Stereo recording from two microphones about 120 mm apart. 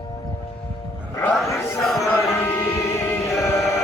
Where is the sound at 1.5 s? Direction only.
Centre (ahead or behind).